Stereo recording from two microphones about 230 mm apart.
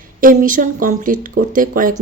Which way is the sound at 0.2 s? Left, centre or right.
Right.